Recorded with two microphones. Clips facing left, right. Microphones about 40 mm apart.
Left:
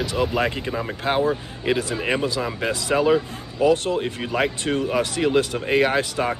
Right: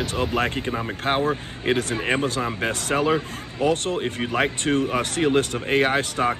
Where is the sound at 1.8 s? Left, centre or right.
Right.